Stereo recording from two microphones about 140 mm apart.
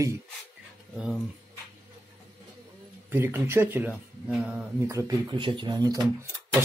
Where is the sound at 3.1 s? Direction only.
15° right (ahead or behind).